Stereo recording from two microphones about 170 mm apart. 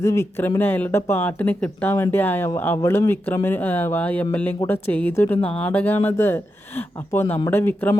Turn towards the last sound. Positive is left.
turn(degrees=10)  # may be behind; listen again after turning